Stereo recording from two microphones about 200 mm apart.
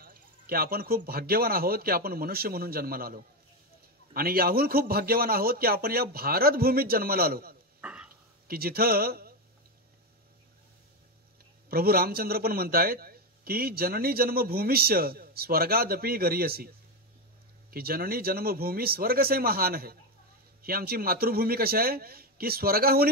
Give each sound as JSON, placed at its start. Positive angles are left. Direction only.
{"t": 0.0, "sound": "a man's voice", "side_deg": -45}
{"t": 7.8, "sound": "a sound", "side_deg": -5}
{"t": 8.5, "sound": "a man's voice", "side_deg": -50}
{"t": 11.7, "sound": "a man's voice", "side_deg": -50}